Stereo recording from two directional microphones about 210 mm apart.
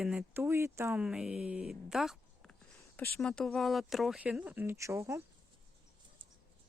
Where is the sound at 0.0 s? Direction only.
5° right (ahead or behind).